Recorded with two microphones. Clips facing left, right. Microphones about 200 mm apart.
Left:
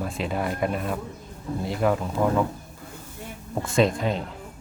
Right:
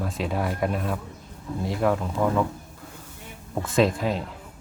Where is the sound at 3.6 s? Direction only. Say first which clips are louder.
Even; centre (ahead or behind).